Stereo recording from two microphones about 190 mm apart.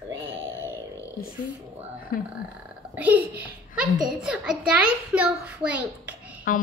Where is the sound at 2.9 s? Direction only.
10° right (ahead or behind).